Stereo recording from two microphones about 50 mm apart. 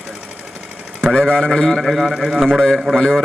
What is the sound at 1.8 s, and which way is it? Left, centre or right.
A man's voice, centre.